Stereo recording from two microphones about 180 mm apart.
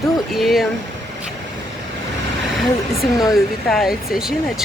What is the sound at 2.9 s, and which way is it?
Speech, 20° left (ahead or behind).